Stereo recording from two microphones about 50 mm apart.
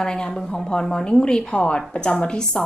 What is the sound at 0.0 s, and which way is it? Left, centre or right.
A woman's voice, centre.